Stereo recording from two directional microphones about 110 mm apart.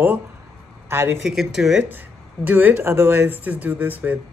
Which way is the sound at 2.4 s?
15° right (ahead or behind).